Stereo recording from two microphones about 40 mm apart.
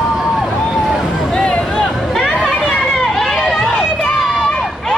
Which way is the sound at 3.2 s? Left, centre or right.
Centre.